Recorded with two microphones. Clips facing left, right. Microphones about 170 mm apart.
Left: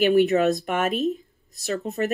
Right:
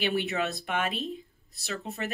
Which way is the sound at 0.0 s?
40° left (ahead or behind).